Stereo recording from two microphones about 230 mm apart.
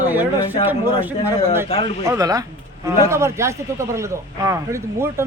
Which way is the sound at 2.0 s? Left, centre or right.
Centre.